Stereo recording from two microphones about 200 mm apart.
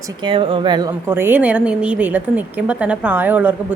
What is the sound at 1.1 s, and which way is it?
A woman's voice, 10° right (ahead or behind).